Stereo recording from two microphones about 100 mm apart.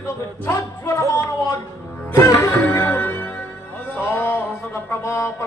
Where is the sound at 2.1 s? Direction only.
25° left (ahead or behind).